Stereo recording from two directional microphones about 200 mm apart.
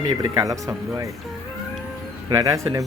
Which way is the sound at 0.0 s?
25° right (ahead or behind).